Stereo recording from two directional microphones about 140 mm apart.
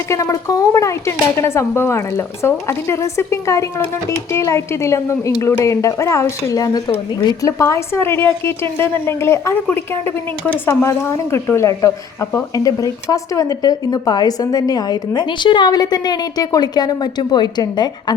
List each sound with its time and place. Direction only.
0.1 s speech: 20° left (ahead or behind)